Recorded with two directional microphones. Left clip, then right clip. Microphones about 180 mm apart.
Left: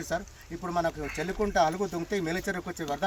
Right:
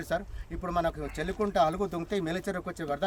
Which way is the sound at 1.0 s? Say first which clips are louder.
Left 1 dB; 15° right (ahead or behind).